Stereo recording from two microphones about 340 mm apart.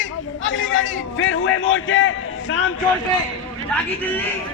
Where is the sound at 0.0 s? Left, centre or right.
Left.